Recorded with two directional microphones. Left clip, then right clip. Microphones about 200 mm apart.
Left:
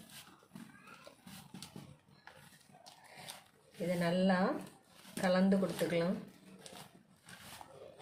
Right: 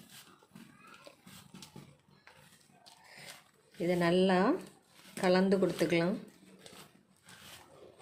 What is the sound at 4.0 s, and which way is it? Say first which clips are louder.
A woman's voice: right 5 dB; 50° right (ahead or behind).